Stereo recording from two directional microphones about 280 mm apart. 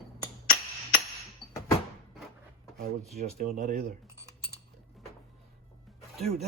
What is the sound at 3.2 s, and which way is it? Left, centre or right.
Speech, right.